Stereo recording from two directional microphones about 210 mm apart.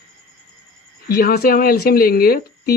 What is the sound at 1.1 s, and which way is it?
Speech, 45° left (ahead or behind).